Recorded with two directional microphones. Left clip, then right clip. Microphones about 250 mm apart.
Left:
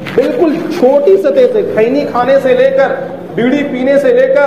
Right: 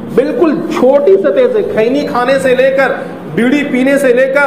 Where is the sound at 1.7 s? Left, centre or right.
Right.